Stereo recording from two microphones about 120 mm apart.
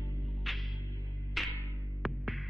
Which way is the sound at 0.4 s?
Centre (ahead or behind).